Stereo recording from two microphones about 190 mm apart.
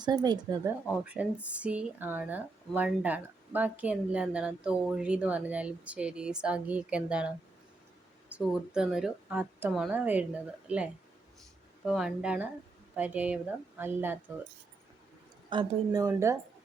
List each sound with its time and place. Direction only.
0.0 s speech: 20° right (ahead or behind)
0.9 s speech: 5° right (ahead or behind)
11.9 s speech: 5° right (ahead or behind)
15.4 s speech: 20° right (ahead or behind)